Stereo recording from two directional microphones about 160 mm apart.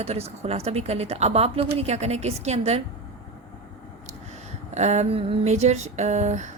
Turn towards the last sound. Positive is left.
turn(degrees=-45)  # may be behind; listen again after turning